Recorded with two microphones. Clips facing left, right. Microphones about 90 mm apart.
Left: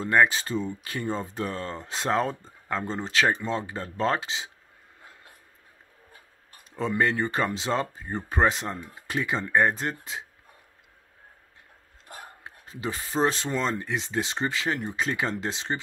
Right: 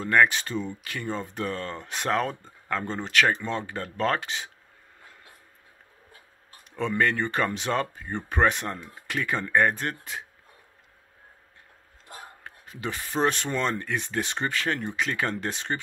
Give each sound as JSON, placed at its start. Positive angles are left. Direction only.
{"t": 0.0, "sound": "speech", "side_deg": 25}
{"t": 6.8, "sound": "speech", "side_deg": 25}
{"t": 12.6, "sound": "speech", "side_deg": 25}